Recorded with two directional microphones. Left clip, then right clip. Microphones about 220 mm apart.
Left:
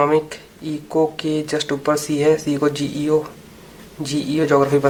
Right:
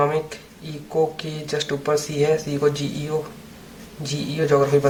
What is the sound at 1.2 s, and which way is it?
Speech, 40° left (ahead or behind).